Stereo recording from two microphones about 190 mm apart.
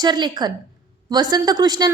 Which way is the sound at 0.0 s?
25° right (ahead or behind).